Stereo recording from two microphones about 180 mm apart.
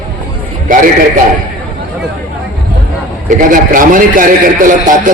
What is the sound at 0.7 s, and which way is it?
Speech, 50° right (ahead or behind).